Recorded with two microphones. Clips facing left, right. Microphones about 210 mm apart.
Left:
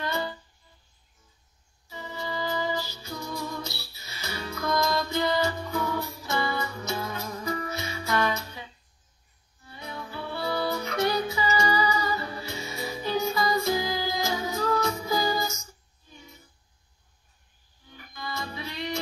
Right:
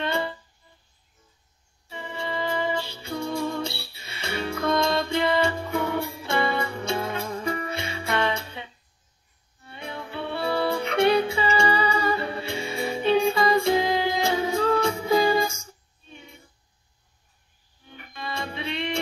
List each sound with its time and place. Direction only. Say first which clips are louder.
0.0 s music: right 3 dB; 25° right (ahead or behind)
2.0 s music: right 3 dB; 25° right (ahead or behind)
10.0 s music: right 5 dB; 65° right (ahead or behind)
10.7 s music: right 9 dB; 30° right (ahead or behind)
17.8 s music: right 3 dB; 65° right (ahead or behind)
18.3 s music: right 5 dB; 25° right (ahead or behind)